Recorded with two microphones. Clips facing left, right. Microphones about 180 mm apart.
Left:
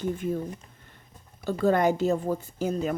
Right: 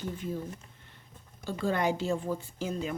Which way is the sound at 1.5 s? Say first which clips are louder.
Left 7 dB; 45° left (ahead or behind).